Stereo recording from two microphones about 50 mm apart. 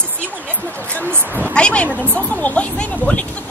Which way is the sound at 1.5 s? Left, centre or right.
Left.